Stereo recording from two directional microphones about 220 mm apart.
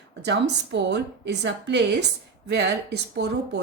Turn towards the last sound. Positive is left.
turn(degrees=-50)  # may be behind; listen again after turning